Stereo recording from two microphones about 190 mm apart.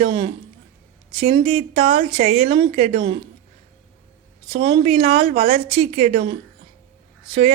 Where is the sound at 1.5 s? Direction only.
30° right (ahead or behind).